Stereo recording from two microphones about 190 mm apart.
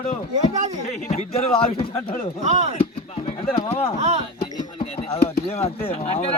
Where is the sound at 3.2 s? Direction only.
30° left (ahead or behind).